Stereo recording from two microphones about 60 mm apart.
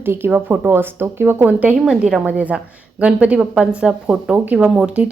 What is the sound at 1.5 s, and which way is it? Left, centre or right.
A woman's voice, right.